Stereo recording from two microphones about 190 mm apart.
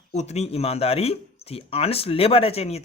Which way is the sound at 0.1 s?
35° left (ahead or behind).